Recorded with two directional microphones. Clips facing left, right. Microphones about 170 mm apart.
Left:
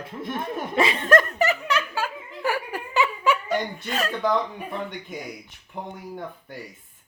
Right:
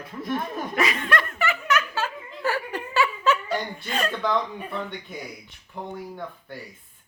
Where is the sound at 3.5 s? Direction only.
Centre (ahead or behind).